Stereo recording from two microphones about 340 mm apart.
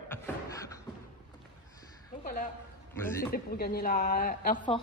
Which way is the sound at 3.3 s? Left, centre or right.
Left.